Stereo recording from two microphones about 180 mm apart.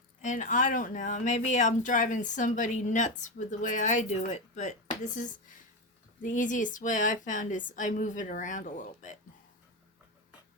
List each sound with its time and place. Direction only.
0.2 s speech: 45° left (ahead or behind)